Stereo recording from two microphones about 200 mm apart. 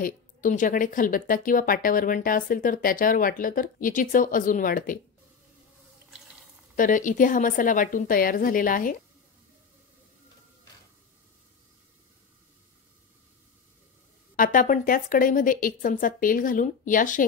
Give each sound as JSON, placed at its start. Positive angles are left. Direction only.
{"t": 0.0, "sound": "speech", "side_deg": 40}
{"t": 6.8, "sound": "speech", "side_deg": 40}
{"t": 14.3, "sound": "speech", "side_deg": 45}